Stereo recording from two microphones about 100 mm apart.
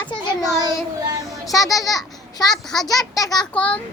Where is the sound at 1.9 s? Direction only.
40° left (ahead or behind).